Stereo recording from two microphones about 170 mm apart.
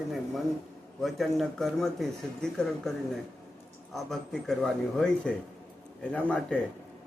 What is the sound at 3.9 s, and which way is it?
A man's voice, centre (ahead or behind).